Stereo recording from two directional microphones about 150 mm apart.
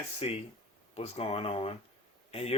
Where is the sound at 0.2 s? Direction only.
40° left (ahead or behind).